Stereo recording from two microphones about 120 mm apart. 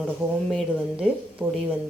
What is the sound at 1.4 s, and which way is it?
Speech, 15° right (ahead or behind).